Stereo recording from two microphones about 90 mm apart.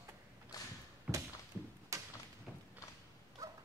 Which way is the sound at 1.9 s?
35° right (ahead or behind).